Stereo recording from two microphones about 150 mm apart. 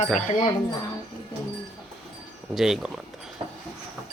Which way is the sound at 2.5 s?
5° right (ahead or behind).